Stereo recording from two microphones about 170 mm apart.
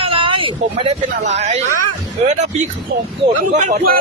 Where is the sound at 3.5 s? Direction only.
45° right (ahead or behind).